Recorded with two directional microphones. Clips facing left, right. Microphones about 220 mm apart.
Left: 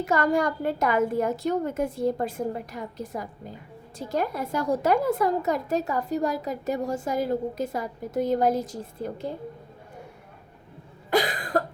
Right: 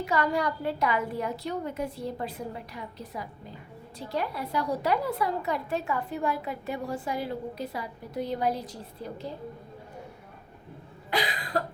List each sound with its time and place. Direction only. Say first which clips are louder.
0.0 s a woman's voice: left 4 dB; 45° left (ahead or behind)
11.1 s cough: left 6 dB; 50° left (ahead or behind)